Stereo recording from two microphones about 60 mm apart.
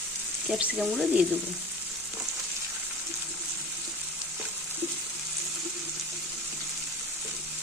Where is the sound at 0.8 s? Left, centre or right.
Centre.